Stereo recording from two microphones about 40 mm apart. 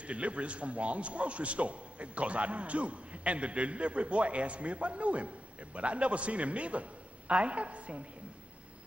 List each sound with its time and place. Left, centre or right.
0.0 s a man's voice: right